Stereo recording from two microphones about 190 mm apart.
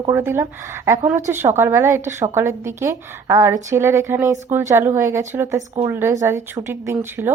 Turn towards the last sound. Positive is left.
turn(degrees=-15)  # may be behind; listen again after turning